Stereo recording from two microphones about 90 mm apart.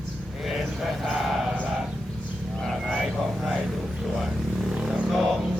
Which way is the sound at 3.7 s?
5° right (ahead or behind).